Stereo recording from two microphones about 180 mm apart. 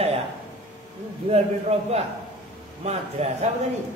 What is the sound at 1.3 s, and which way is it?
A man's voice, 35° right (ahead or behind).